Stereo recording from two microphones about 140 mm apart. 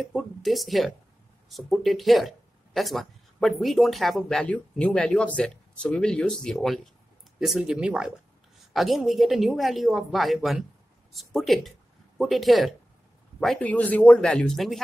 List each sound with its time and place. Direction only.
0.0 s speech: centre (ahead or behind)